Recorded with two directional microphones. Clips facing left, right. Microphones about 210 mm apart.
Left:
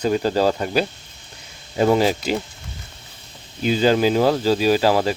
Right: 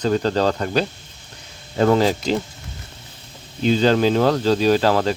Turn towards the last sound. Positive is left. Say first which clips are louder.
# even
turn(degrees=10)  # may be behind; listen again after turning